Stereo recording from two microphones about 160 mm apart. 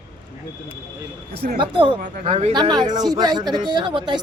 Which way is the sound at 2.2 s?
45° right (ahead or behind).